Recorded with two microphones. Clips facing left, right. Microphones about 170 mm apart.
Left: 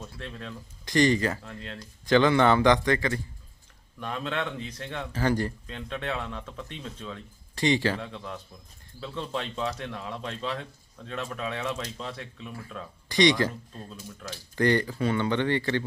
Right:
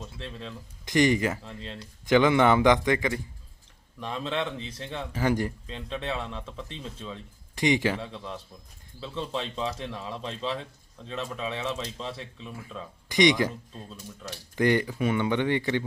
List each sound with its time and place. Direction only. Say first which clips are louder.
0.9 s speech: even; 15° right (ahead or behind)
4.1 s speech: right 1 dB; 25° right (ahead or behind)
5.1 s speech: even; 15° right (ahead or behind)
5.7 s speech: even; centre (ahead or behind)
7.5 s speech: even; 15° right (ahead or behind)
8.0 s speech: even; centre (ahead or behind)
13.1 s speech: even; 20° right (ahead or behind)